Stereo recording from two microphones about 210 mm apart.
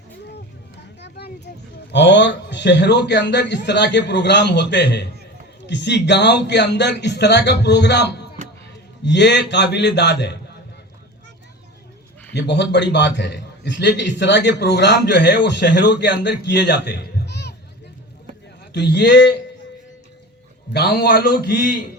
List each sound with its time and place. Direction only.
1.0 s a sound: 55° left (ahead or behind)
1.9 s a man's voice: 55° left (ahead or behind)
12.3 s a man's voice: 55° left (ahead or behind)
18.7 s a man's voice: 50° left (ahead or behind)
20.7 s a man's voice: 50° left (ahead or behind)